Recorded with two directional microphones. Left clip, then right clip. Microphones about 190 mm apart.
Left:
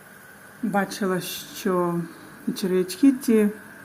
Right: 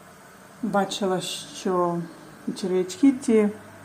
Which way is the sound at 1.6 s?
30° left (ahead or behind).